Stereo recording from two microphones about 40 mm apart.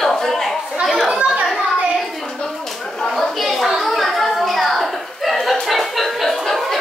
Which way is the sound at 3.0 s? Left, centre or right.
Centre.